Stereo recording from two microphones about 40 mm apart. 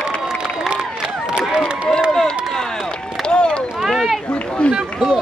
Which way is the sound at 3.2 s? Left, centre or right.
Left.